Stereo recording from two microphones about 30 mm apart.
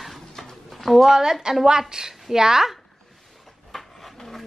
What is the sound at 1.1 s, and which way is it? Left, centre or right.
A woman's voice, centre.